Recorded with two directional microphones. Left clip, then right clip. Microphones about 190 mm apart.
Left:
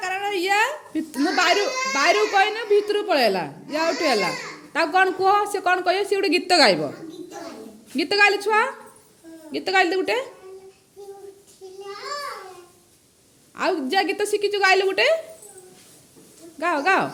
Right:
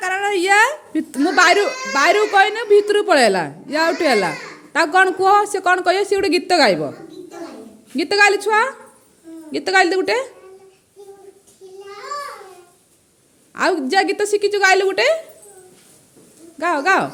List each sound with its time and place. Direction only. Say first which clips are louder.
0.0 s a child's voice: right 6 dB; 25° right (ahead or behind)
7.9 s a child's voice: right 4 dB; 20° right (ahead or behind)
13.5 s a child's voice: right 5 dB; 25° right (ahead or behind)
16.6 s speech: right 4 dB; 15° right (ahead or behind)